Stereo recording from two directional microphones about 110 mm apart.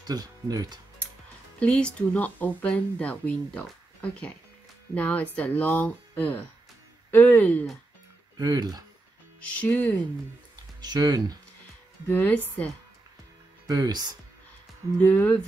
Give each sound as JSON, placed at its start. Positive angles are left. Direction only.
{"t": 0.0, "sound": "speech", "side_deg": -35}
{"t": 1.6, "sound": "speech", "side_deg": 10}
{"t": 8.4, "sound": "speech", "side_deg": -35}
{"t": 9.5, "sound": "speech", "side_deg": 10}
{"t": 10.8, "sound": "speech", "side_deg": -40}
{"t": 12.1, "sound": "speech", "side_deg": 15}
{"t": 13.7, "sound": "speech", "side_deg": -35}
{"t": 15.0, "sound": "speech", "side_deg": 15}